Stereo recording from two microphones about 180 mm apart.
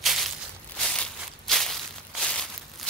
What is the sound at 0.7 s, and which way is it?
Walk, 5° left (ahead or behind).